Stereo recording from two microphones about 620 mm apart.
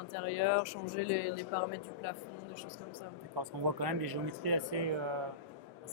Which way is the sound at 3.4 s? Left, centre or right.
Right.